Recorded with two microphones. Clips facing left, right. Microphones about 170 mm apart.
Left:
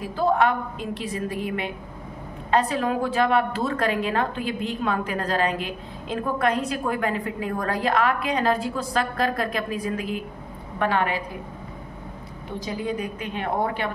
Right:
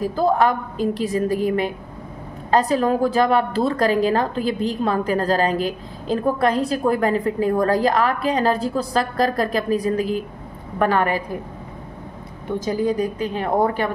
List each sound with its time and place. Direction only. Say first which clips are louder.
0.0 s a woman's voice: right 3 dB; 40° right (ahead or behind)
12.5 s a woman's voice: right 7 dB; 40° right (ahead or behind)